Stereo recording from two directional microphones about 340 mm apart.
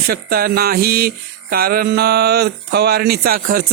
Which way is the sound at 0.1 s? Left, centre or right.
Right.